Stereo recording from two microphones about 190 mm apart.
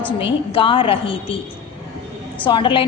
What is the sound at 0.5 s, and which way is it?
Speech, 25° left (ahead or behind).